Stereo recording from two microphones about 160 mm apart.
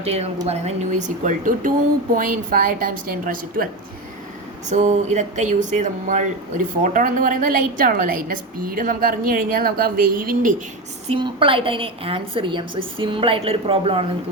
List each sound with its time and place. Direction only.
0.0 s a woman's voice: 40° right (ahead or behind); by 3.7 s 60° right (ahead or behind)
4.7 s speech: 45° right (ahead or behind)
11.1 s a woman's voice: 35° right (ahead or behind)